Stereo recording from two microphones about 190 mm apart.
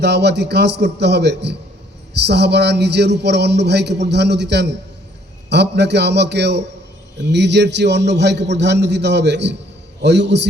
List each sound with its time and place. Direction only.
0.0 s a man's voice: 60° right (ahead or behind)